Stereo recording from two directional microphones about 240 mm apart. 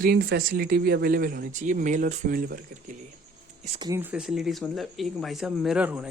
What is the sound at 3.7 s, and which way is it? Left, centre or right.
Speech, centre.